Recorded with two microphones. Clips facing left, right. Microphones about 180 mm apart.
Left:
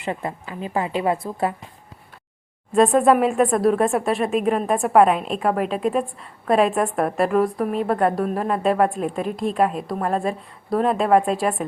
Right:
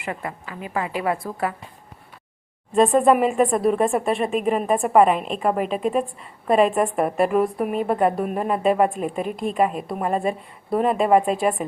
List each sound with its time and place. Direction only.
0.0 s a woman's voice: 25° left (ahead or behind)
2.7 s speech: centre (ahead or behind)